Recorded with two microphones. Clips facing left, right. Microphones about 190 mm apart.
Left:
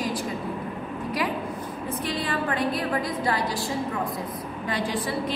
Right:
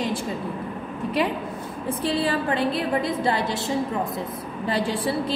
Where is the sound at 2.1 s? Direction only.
30° right (ahead or behind).